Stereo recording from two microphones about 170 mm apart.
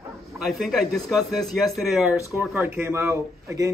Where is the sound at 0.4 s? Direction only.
Centre (ahead or behind).